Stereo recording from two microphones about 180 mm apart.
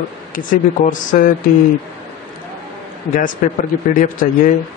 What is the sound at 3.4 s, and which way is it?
Speech, 50° left (ahead or behind).